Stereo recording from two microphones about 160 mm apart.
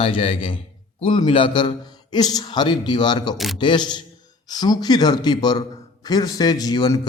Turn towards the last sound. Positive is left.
turn(degrees=25)  # may be behind; listen again after turning